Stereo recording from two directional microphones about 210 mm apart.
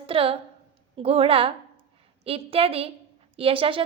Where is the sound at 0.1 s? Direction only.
25° right (ahead or behind).